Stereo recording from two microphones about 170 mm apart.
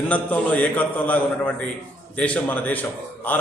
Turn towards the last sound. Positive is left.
turn(degrees=10)  # may be behind; listen again after turning